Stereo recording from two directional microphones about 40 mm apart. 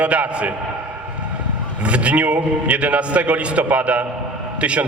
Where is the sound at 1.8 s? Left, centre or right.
Right.